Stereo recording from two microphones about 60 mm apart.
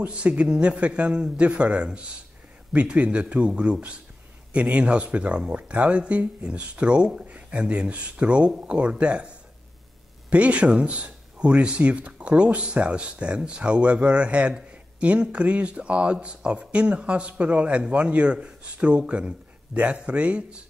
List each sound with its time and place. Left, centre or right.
0.0 s a man's voice: centre
10.3 s a man's voice: right